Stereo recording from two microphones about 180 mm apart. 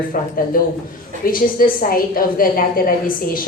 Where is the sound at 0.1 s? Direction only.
50° left (ahead or behind).